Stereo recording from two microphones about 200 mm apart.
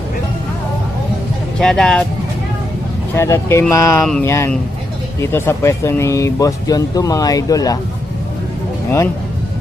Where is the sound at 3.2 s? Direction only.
15° left (ahead or behind).